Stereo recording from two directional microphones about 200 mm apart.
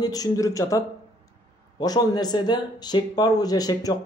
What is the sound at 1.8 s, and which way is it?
Speech, 20° left (ahead or behind).